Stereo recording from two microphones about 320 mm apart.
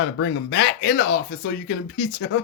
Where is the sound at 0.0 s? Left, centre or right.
Left.